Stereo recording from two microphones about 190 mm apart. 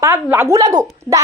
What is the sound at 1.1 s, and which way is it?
Speech, 15° left (ahead or behind).